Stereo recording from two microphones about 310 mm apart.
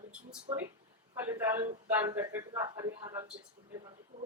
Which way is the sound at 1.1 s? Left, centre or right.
Centre.